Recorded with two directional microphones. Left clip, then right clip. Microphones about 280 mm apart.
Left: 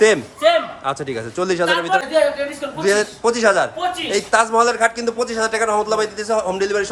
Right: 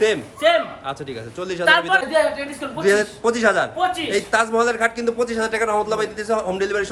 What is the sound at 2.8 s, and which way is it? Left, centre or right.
A man's voice, centre.